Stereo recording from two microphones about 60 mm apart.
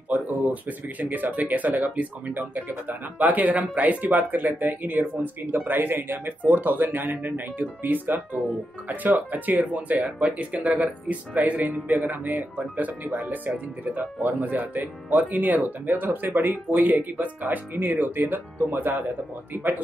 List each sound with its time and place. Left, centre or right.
0.1 s speech: right